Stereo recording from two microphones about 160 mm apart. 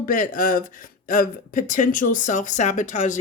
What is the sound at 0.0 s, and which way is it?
A woman's voice, 60° left (ahead or behind).